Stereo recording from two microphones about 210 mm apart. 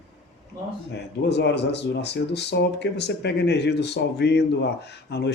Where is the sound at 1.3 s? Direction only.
55° left (ahead or behind).